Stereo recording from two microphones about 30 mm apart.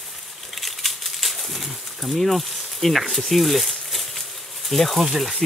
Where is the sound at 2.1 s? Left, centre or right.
Centre.